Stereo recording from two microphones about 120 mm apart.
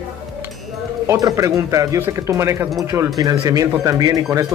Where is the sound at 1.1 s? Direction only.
30° right (ahead or behind).